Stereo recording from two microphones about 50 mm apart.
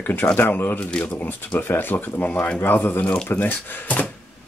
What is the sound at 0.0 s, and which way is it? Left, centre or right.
Speech, left.